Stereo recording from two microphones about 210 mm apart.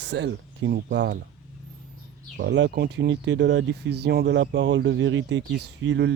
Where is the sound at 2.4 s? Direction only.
55° right (ahead or behind).